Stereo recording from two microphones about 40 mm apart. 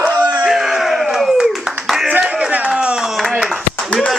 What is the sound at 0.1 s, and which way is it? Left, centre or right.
Crowd, right.